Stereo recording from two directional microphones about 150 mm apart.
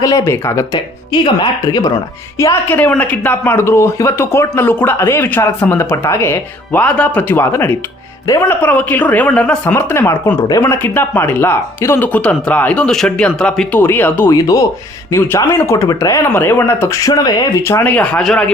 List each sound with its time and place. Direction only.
0.0 s speech: 25° left (ahead or behind)
2.4 s speech: 15° left (ahead or behind)
14.3 s speech: 25° left (ahead or behind)
17.7 s speech: 15° left (ahead or behind)